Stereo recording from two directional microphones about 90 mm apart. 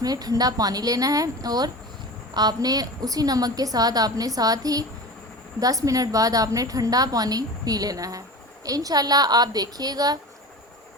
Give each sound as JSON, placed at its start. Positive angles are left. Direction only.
{"t": 0.0, "sound": "a woman's voice", "side_deg": -45}